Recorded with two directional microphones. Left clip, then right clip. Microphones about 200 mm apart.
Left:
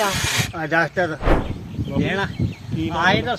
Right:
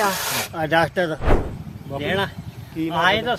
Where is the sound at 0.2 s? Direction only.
45° right (ahead or behind).